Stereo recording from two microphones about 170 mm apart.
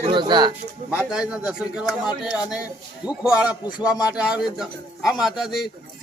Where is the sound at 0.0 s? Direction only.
30° right (ahead or behind).